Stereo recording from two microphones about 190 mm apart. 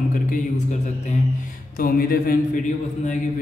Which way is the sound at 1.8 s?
50° left (ahead or behind).